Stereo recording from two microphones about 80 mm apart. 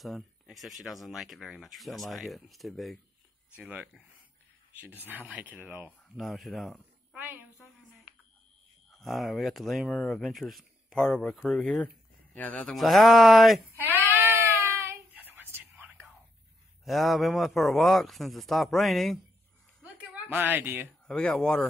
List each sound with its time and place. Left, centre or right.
0.0 s speech: centre
3.5 s speech: centre
6.1 s speech: centre
7.2 s a woman's voice: right
8.9 s speech: centre
11.6 s speech: centre
12.6 s speech: centre
13.7 s speech: right
14.0 s a sound: right
15.1 s whispering: right
16.8 s speech: centre
20.2 s speech: right
21.1 s speech: centre